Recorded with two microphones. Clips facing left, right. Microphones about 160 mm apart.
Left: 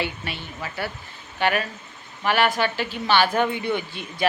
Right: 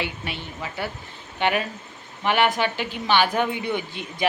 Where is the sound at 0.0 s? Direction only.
15° right (ahead or behind).